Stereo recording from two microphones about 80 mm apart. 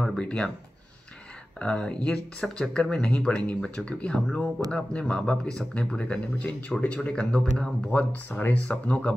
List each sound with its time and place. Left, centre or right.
0.0 s speech: centre
1.6 s speech: centre
7.9 s speech: centre